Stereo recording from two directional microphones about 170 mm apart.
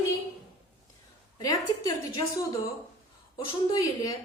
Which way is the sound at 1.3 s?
20° left (ahead or behind).